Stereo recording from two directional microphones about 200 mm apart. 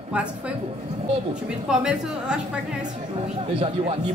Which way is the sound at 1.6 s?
5° right (ahead or behind).